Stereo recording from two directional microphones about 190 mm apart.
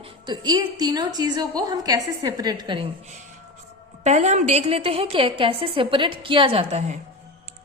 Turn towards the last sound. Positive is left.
turn(degrees=-35)  # may be behind; listen again after turning